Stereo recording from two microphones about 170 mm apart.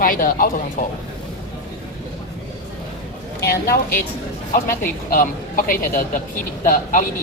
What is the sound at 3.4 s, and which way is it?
Speech, 65° left (ahead or behind).